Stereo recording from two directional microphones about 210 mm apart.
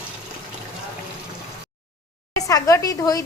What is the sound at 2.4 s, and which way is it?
Speech, 15° left (ahead or behind).